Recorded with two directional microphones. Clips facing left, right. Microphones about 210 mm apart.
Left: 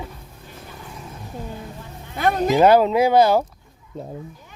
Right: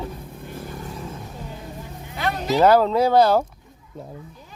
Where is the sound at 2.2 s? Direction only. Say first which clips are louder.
Left 6 dB; 50° left (ahead or behind).